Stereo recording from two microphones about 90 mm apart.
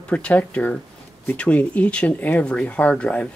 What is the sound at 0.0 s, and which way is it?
Speech, 15° left (ahead or behind).